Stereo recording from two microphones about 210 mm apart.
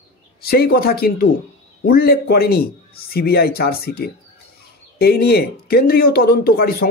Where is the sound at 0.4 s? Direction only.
45° left (ahead or behind).